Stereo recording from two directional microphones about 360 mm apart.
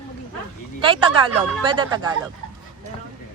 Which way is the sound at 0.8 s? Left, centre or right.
Centre.